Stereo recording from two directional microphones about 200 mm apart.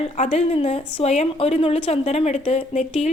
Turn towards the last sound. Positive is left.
turn(degrees=30)  # may be behind; listen again after turning